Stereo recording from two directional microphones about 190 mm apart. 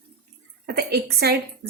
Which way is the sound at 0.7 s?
55° right (ahead or behind).